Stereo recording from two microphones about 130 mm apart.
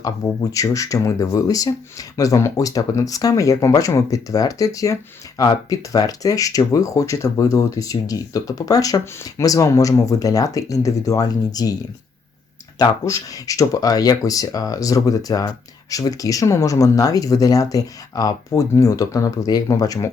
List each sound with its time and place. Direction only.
0.5 s speech: 25° left (ahead or behind)
12.8 s speech: 25° left (ahead or behind)